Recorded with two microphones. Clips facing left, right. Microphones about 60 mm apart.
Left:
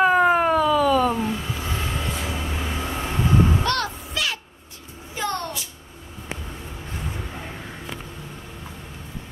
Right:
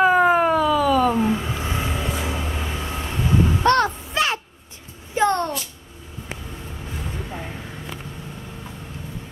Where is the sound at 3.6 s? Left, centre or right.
Right.